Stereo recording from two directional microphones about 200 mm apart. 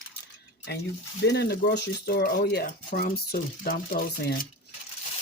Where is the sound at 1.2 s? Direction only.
55° left (ahead or behind).